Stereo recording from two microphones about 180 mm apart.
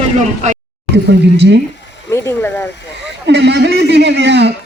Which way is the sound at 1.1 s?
70° right (ahead or behind).